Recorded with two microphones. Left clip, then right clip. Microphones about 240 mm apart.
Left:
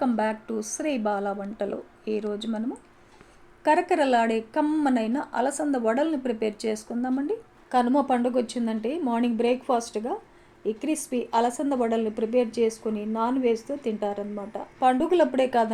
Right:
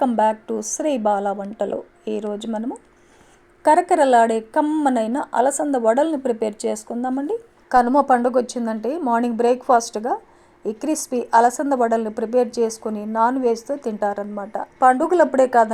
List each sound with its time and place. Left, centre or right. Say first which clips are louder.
0.0 s a woman's voice: right 8 dB; right